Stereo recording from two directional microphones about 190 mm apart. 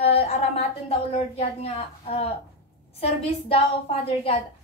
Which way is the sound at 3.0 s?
30° left (ahead or behind).